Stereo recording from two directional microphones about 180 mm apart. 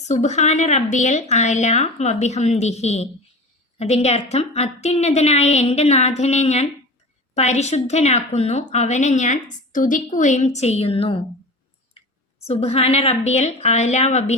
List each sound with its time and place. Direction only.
0.0 s a woman's voice: 40° left (ahead or behind)
12.5 s a woman's voice: 35° left (ahead or behind)